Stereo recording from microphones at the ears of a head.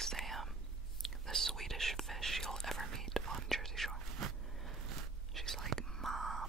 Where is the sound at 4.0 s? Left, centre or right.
Right.